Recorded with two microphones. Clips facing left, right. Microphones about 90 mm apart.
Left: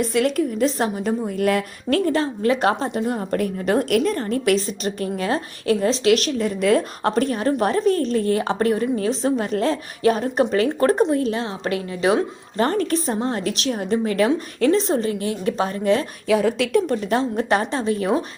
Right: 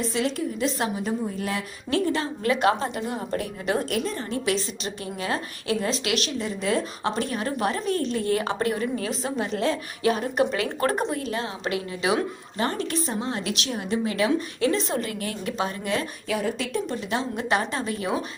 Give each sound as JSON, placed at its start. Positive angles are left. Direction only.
{"t": 0.0, "sound": "a woman's voice", "side_deg": 60}
{"t": 0.6, "sound": "a woman's voice", "side_deg": 40}
{"t": 1.4, "sound": "a woman's voice", "side_deg": 55}
{"t": 2.2, "sound": "a woman's voice", "side_deg": 35}
{"t": 3.1, "sound": "a woman's voice", "side_deg": 50}
{"t": 6.6, "sound": "a woman's voice", "side_deg": 55}
{"t": 16.5, "sound": "a woman's voice", "side_deg": 80}
{"t": 16.8, "sound": "a woman's voice", "side_deg": 45}